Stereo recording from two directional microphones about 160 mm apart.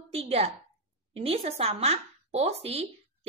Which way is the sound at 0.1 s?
40° right (ahead or behind).